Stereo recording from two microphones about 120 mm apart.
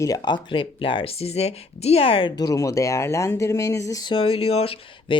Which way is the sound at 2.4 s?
30° left (ahead or behind).